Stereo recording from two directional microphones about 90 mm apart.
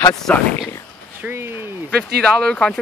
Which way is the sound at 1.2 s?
25° right (ahead or behind).